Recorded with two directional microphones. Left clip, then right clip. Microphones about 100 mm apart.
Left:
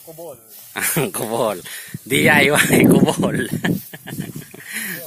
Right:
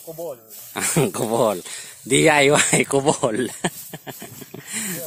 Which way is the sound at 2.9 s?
20° right (ahead or behind).